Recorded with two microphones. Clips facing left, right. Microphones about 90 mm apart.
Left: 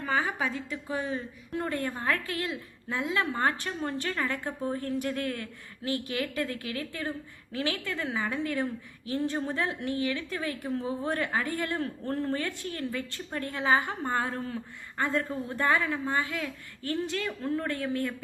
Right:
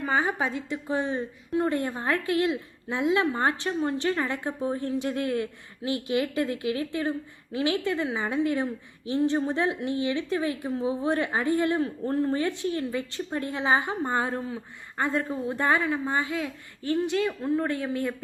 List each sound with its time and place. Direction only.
0.0 s a woman's voice: 20° right (ahead or behind)